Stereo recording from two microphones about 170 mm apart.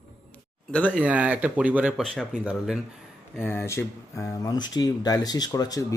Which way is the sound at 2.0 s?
5° left (ahead or behind).